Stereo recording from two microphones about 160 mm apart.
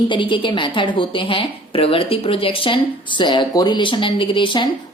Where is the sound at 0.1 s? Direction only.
30° left (ahead or behind).